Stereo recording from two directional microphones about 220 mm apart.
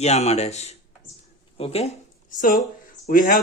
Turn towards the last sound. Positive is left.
turn(degrees=40)  # may be behind; listen again after turning